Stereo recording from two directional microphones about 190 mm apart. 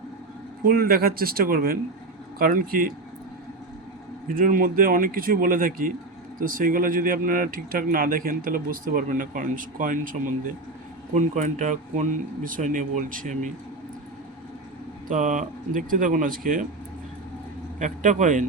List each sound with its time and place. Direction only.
0.6 s speech: 50° right (ahead or behind)
4.4 s speech: 45° right (ahead or behind)
15.0 s speech: 40° right (ahead or behind)
17.7 s speech: 40° right (ahead or behind)